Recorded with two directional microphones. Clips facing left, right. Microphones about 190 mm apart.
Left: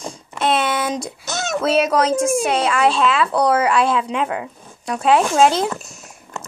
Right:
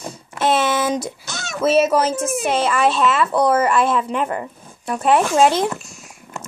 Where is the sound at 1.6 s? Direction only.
5° right (ahead or behind).